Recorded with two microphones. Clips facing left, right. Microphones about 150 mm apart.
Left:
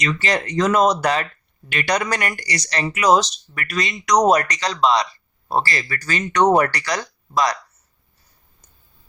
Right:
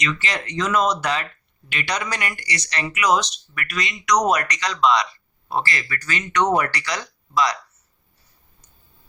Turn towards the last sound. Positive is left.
turn(degrees=45)  # may be behind; listen again after turning